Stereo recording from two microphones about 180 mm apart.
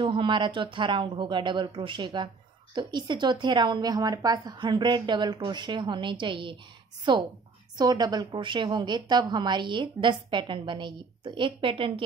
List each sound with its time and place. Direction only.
0.0 s a woman's voice: 25° right (ahead or behind)